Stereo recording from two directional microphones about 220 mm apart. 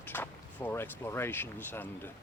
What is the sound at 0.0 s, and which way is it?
Speech, 10° left (ahead or behind).